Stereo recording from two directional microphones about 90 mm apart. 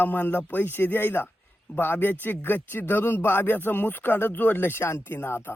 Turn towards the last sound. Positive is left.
turn(degrees=25)  # may be behind; listen again after turning